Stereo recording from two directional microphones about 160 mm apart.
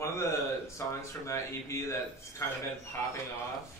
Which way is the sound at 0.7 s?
20° left (ahead or behind).